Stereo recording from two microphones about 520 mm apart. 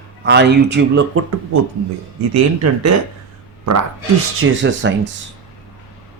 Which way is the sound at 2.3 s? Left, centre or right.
Right.